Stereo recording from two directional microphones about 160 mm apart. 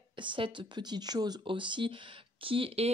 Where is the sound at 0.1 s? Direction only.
30° right (ahead or behind).